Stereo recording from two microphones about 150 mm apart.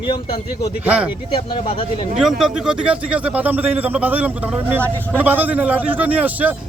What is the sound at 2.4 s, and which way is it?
A man's voice, 5° right (ahead or behind).